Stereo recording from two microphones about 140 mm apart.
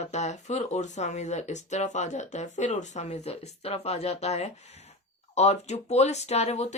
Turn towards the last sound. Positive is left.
turn(degrees=50)  # may be behind; listen again after turning